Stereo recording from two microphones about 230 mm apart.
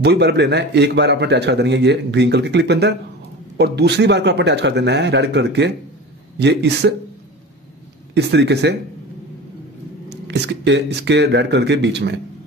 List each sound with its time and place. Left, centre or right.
0.0 s a man's voice: right
8.1 s a man's voice: right
10.0 s a man's voice: right